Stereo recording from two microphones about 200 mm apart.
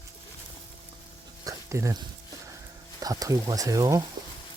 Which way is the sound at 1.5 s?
15° right (ahead or behind).